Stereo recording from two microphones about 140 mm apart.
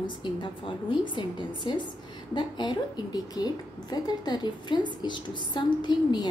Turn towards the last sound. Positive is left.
turn(degrees=30)  # may be behind; listen again after turning